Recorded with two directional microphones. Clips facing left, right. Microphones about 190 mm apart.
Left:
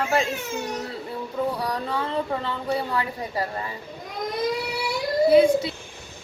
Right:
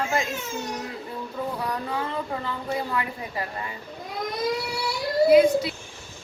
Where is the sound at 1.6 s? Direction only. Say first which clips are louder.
Left 2 dB; 30° left (ahead or behind).